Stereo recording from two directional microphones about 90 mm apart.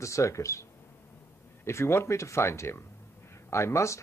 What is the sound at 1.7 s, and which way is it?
Speech, 30° left (ahead or behind).